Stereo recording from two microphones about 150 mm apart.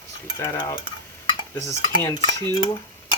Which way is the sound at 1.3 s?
25° left (ahead or behind).